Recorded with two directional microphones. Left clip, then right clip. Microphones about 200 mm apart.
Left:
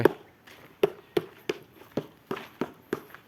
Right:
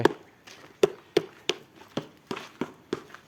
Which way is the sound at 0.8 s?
45° right (ahead or behind).